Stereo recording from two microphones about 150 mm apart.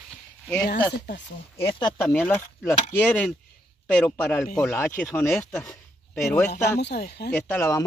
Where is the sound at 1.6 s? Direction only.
35° left (ahead or behind).